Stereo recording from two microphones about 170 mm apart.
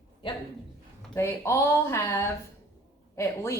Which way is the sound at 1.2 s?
15° left (ahead or behind).